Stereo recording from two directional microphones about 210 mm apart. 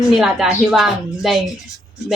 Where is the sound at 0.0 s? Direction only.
Centre (ahead or behind).